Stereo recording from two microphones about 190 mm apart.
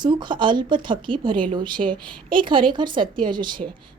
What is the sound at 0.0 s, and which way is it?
Speech, 25° right (ahead or behind).